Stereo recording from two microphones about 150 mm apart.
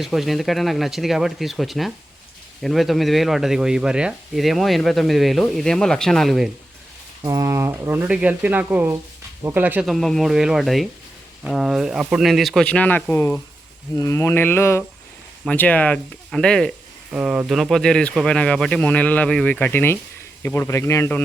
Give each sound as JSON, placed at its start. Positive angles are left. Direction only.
{"t": 0.0, "sound": "speech", "side_deg": 0}
{"t": 7.2, "sound": "speech", "side_deg": -25}
{"t": 9.8, "sound": "speech", "side_deg": 0}
{"t": 17.1, "sound": "speech", "side_deg": -5}